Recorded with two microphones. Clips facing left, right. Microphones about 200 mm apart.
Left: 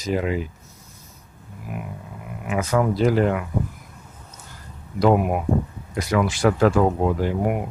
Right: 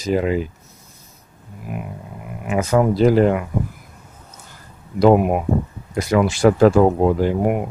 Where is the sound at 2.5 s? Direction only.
25° right (ahead or behind).